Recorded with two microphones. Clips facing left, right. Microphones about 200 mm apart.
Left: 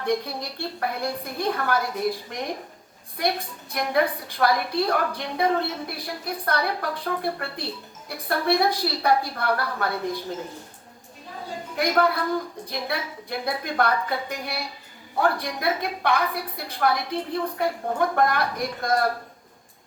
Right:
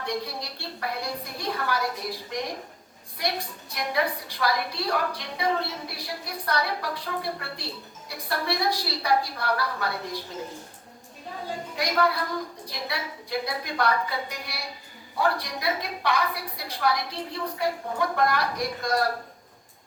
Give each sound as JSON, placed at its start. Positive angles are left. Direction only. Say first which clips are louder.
{"t": 0.0, "sound": "a woman's voice", "louder": "left 5 dB", "side_deg": 55}
{"t": 11.8, "sound": "a woman's voice", "louder": "left 4 dB", "side_deg": 55}